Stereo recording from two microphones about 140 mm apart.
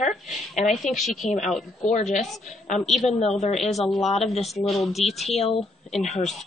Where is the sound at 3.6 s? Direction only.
Centre (ahead or behind).